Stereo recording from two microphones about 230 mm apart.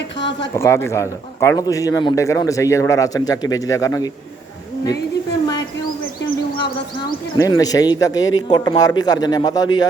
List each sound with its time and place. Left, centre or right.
0.2 s a sound: left
0.5 s a man's voice: centre
7.3 s a man's voice: centre